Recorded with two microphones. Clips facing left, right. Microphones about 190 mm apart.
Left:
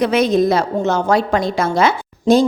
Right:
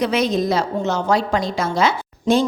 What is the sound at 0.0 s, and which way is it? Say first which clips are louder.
A woman's voice: left 5 dB; 55° left (ahead or behind).